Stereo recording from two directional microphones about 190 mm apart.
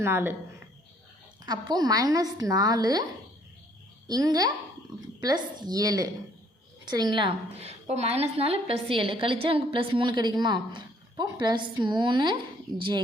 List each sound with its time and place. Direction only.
0.0 s speech: 10° right (ahead or behind)
1.5 s a woman's voice: 20° right (ahead or behind)